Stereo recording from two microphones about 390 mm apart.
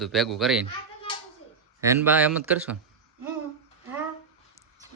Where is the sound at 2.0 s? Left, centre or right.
Centre.